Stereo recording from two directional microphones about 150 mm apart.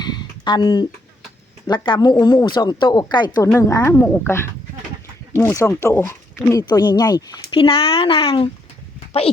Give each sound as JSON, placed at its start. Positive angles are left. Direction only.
{"t": 0.0, "sound": "a sound", "side_deg": 30}
{"t": 1.6, "sound": "a woman's voice", "side_deg": 30}
{"t": 7.5, "sound": "speech", "side_deg": 40}